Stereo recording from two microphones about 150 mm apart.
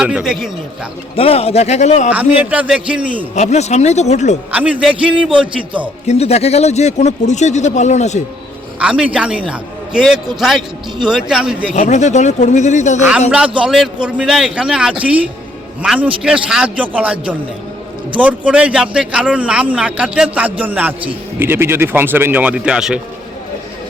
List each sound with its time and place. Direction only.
0.0 s a man's voice: 5° right (ahead or behind)
1.1 s speech: 40° left (ahead or behind)
2.0 s a man's voice: 10° right (ahead or behind)
3.3 s speech: 50° left (ahead or behind)
4.5 s a man's voice: 10° right (ahead or behind)
6.1 s speech: 45° left (ahead or behind)
8.8 s a man's voice: 5° right (ahead or behind)
11.7 s speech: 50° left (ahead or behind)
13.6 s a man's voice: centre (ahead or behind)